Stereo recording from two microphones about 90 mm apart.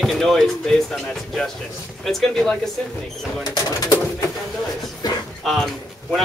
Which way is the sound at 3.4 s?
45° left (ahead or behind).